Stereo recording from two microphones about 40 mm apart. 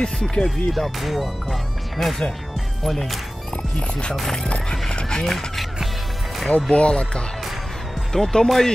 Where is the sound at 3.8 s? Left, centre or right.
Left.